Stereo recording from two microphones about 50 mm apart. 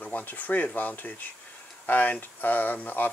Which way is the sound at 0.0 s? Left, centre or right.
Left.